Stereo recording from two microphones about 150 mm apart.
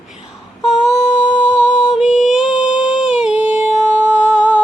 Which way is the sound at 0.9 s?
50° left (ahead or behind).